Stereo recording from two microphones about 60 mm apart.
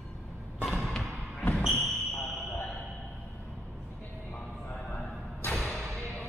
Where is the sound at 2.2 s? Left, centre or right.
Centre.